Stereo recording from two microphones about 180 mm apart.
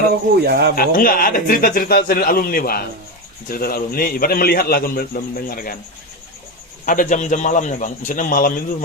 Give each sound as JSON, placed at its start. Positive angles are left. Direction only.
{"t": 0.3, "sound": "speech", "side_deg": -65}
{"t": 0.8, "sound": "a man's voice", "side_deg": 50}
{"t": 6.8, "sound": "speech", "side_deg": 50}